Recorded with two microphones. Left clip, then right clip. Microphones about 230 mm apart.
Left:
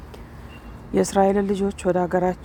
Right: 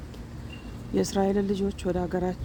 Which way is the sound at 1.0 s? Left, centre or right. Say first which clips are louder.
Left 7 dB; left.